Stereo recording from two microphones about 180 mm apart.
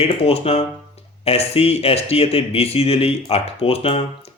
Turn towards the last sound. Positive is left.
turn(degrees=35)  # may be behind; listen again after turning